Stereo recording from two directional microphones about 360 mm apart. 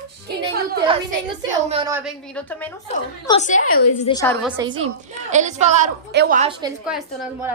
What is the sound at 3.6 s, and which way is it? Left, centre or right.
Speech, left.